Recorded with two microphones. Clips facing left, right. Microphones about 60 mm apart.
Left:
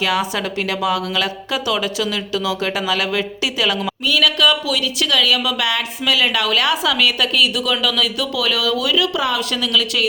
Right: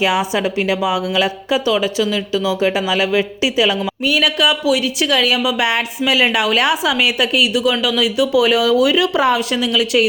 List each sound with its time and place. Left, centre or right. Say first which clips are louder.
0.0 s speech: right 3 dB; centre
4.0 s speech: even; right
9.5 s speech: right 3 dB; centre